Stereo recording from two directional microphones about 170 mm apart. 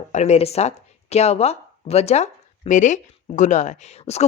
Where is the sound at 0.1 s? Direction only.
40° left (ahead or behind).